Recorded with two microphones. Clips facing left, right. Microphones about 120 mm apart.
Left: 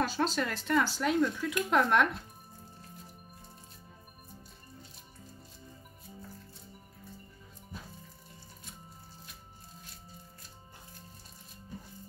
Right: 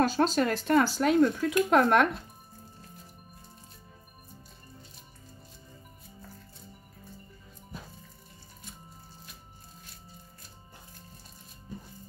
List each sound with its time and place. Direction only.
0.1 s speech: 45° right (ahead or behind)